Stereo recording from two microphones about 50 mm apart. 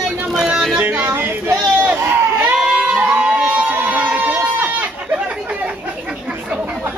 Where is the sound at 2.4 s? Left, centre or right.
Right.